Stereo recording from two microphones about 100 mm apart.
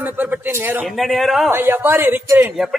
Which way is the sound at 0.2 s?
20° right (ahead or behind).